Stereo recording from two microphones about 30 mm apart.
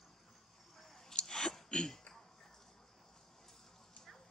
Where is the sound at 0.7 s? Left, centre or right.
Centre.